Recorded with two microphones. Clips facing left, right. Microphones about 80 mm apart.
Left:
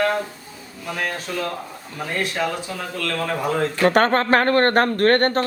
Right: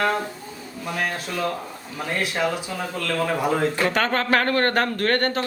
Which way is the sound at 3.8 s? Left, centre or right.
Left.